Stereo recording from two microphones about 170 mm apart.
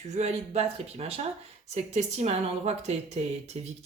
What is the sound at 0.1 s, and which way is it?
Speech, 40° right (ahead or behind).